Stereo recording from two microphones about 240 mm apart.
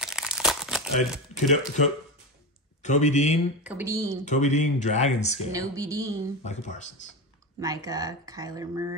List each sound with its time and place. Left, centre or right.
0.0 s crumpling: centre
2.8 s speech: left
3.6 s speech: centre
4.2 s speech: left
5.5 s speech: centre
6.4 s speech: left
7.6 s speech: centre